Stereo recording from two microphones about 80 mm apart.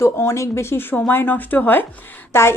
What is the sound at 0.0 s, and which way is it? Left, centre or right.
A woman's voice, left.